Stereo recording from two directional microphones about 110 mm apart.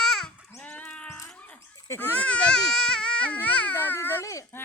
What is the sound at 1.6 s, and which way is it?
Speech, 25° left (ahead or behind).